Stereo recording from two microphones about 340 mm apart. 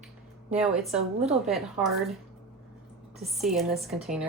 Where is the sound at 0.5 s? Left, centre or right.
Centre.